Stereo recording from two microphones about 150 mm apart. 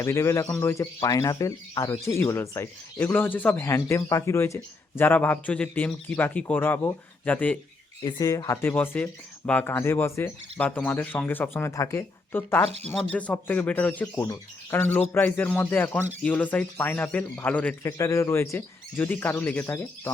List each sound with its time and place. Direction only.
0.0 s speech: 20° left (ahead or behind)
8.0 s speech: 25° left (ahead or behind)